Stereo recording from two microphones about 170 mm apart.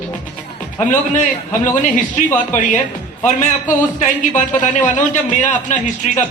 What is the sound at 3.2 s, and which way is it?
Speech, 45° left (ahead or behind).